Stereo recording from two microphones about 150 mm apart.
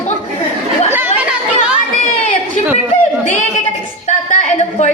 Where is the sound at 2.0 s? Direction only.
55° left (ahead or behind).